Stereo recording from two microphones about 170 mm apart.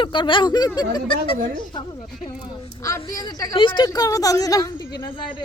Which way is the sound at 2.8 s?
20° left (ahead or behind).